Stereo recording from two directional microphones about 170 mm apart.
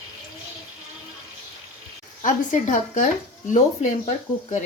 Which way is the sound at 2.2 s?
50° left (ahead or behind).